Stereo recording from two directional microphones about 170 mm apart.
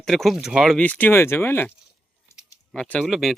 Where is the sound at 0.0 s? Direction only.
Centre (ahead or behind).